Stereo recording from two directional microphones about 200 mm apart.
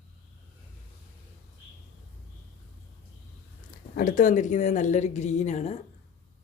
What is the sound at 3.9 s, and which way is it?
Speech, 40° left (ahead or behind).